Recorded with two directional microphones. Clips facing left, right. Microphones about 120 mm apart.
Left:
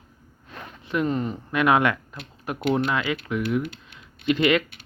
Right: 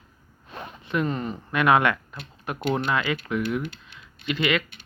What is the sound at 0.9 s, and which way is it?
Speech, 15° left (ahead or behind).